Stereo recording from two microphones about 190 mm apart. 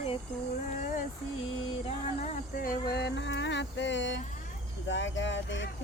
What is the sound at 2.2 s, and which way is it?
Insect, 40° left (ahead or behind).